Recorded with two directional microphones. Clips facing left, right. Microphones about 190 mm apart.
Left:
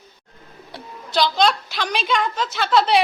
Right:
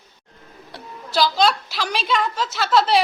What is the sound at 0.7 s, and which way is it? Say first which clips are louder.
A woman's voice: even; centre (ahead or behind).